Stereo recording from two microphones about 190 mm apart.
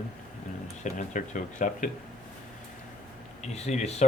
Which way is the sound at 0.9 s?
40° left (ahead or behind).